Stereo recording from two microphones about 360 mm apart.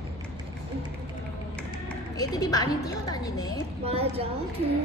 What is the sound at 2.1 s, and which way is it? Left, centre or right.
A woman's voice, centre.